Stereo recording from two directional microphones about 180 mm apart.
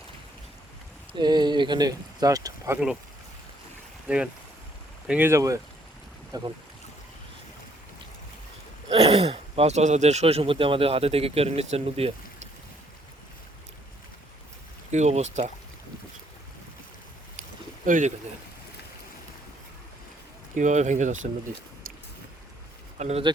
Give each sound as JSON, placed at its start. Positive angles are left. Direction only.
{"t": 1.1, "sound": "speech", "side_deg": -25}
{"t": 4.1, "sound": "speech", "side_deg": -5}
{"t": 8.9, "sound": "speech", "side_deg": -35}
{"t": 14.9, "sound": "speech", "side_deg": -40}
{"t": 17.8, "sound": "speech", "side_deg": -45}
{"t": 20.6, "sound": "speech", "side_deg": -40}
{"t": 23.0, "sound": "speech", "side_deg": -35}